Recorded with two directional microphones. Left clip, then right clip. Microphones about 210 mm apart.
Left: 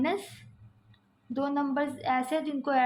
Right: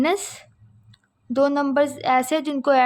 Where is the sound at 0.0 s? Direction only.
50° right (ahead or behind).